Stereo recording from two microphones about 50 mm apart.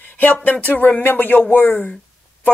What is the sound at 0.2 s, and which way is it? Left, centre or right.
Speech, left.